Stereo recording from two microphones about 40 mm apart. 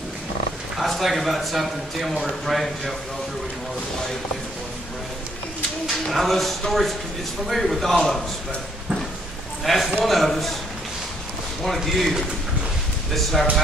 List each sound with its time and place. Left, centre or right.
0.7 s speech: centre
5.9 s speech: centre
9.7 s speech: centre
11.6 s speech: centre
13.1 s speech: centre